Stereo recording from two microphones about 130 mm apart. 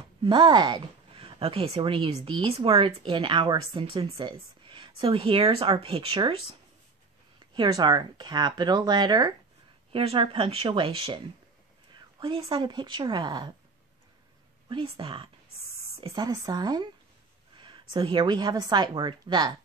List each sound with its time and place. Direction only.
0.2 s a woman's voice: 35° right (ahead or behind)
11.9 s a sound: 40° right (ahead or behind)
12.4 s a woman's voice: 40° right (ahead or behind)
14.7 s speech: 40° right (ahead or behind)
16.0 s a woman's voice: 30° right (ahead or behind)